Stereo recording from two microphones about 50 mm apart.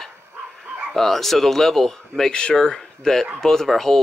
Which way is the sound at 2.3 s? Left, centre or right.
Centre.